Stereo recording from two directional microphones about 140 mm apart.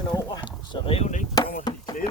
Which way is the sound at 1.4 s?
25° left (ahead or behind).